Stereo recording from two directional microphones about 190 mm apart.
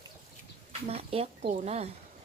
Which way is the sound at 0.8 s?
30° right (ahead or behind).